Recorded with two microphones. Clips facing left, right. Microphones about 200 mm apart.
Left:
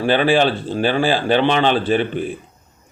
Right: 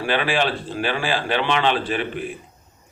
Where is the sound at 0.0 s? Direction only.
35° left (ahead or behind).